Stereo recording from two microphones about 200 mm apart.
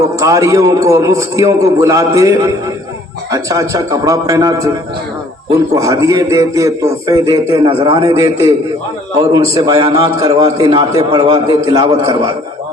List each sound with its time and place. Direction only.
0.2 s a man's voice: 15° right (ahead or behind)
5.7 s a man's voice: 15° right (ahead or behind)